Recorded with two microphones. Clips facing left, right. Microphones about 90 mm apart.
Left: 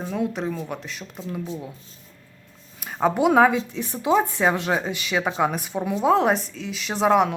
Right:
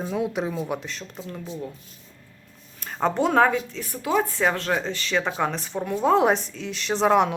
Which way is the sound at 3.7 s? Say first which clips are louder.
Left 3 dB; 20° left (ahead or behind).